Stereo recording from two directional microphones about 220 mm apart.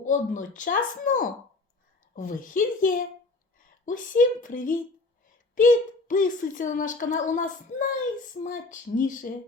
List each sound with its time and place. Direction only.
0.0 s a woman's voice: 35° left (ahead or behind)